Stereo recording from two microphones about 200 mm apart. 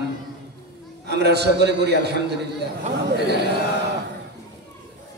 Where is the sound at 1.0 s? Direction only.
55° right (ahead or behind).